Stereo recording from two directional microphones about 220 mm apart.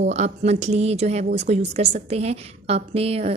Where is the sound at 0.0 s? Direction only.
30° right (ahead or behind).